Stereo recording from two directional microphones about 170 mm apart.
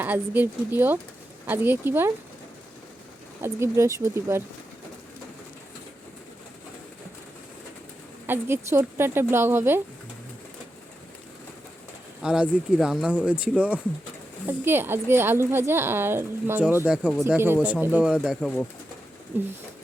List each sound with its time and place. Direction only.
0.0 s a woman's voice: 10° right (ahead or behind)
3.4 s a woman's voice: 15° right (ahead or behind)
8.3 s a woman's voice: 15° right (ahead or behind)
12.2 s a woman's voice: 5° right (ahead or behind)